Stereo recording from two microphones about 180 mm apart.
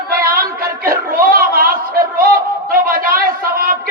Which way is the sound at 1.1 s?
50° right (ahead or behind).